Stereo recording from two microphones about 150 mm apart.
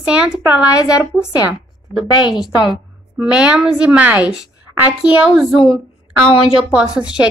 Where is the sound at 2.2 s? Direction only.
5° right (ahead or behind).